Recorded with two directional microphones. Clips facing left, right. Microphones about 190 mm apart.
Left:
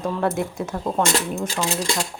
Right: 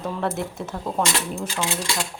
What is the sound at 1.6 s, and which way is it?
Speech, 40° left (ahead or behind).